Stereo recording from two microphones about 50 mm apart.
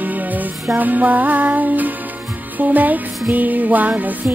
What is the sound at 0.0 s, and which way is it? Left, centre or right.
Music, right.